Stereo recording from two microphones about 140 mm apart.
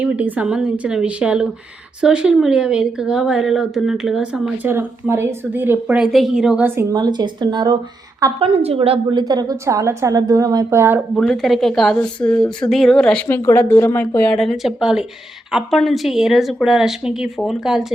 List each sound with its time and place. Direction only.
0.0 s speech: 10° right (ahead or behind)
6.9 s speech: 30° right (ahead or behind)
8.4 s a woman's voice: 45° right (ahead or behind)
9.0 s a woman's voice: 25° right (ahead or behind)
11.1 s speech: 5° left (ahead or behind)
13.2 s speech: 15° left (ahead or behind); by 17.8 s centre (ahead or behind)